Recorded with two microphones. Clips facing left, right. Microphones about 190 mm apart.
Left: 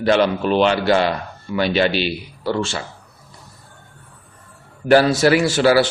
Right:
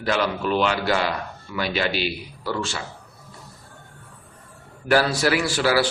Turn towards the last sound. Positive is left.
turn(degrees=25)  # may be behind; listen again after turning